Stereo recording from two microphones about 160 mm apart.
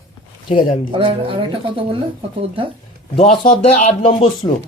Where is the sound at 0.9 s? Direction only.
30° right (ahead or behind).